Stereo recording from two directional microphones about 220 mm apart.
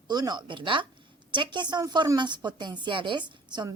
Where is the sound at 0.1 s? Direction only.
20° right (ahead or behind).